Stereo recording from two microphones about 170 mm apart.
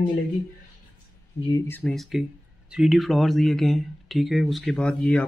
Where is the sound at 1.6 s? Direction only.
10° left (ahead or behind).